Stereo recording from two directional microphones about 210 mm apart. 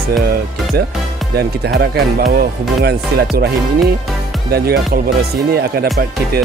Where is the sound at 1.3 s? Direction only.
50° right (ahead or behind).